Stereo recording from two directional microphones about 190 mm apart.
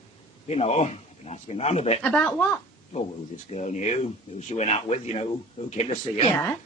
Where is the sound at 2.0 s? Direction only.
5° left (ahead or behind).